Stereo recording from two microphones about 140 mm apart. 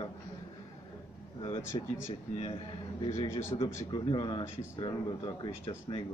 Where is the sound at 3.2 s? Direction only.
20° left (ahead or behind).